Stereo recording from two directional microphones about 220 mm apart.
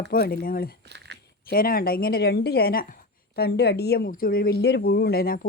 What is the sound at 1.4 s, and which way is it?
A woman's voice, 40° left (ahead or behind).